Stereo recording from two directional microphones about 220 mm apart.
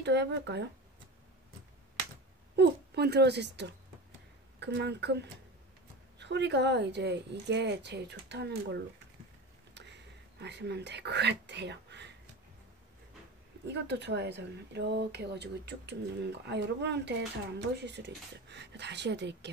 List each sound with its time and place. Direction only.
0.0 s speech: 50° right (ahead or behind)
2.5 s speech: 50° right (ahead or behind)
10.4 s speech: 50° right (ahead or behind)
13.7 s speech: 50° right (ahead or behind)